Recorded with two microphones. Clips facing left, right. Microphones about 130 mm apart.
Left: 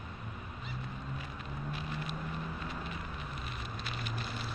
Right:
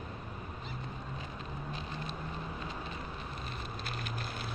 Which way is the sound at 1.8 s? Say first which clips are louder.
Left 1 dB; 30° right (ahead or behind).